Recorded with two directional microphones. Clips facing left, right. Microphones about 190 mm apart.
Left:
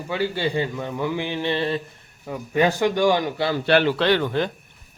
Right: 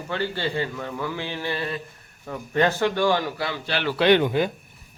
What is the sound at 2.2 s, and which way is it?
A man's voice, 10° left (ahead or behind).